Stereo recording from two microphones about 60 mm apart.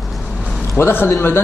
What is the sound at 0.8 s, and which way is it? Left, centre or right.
Speech, left.